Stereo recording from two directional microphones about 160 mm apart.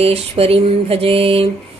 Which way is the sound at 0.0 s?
35° right (ahead or behind).